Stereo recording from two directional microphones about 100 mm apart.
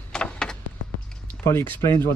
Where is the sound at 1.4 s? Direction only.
25° left (ahead or behind).